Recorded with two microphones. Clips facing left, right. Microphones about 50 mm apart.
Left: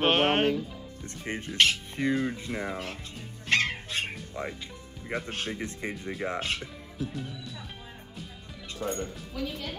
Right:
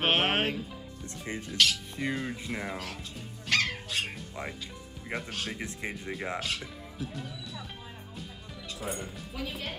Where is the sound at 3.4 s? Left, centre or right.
Left.